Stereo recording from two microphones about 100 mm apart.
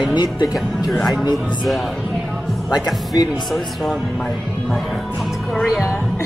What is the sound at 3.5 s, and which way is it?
Speech, centre (ahead or behind).